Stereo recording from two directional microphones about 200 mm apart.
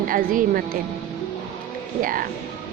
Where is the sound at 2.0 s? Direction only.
45° right (ahead or behind).